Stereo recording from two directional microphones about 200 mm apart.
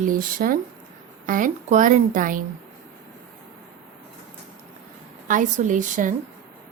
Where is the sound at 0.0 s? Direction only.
45° right (ahead or behind).